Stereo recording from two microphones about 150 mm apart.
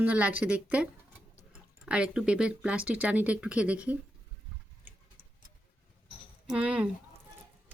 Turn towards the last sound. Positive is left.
turn(degrees=-10)  # may be behind; listen again after turning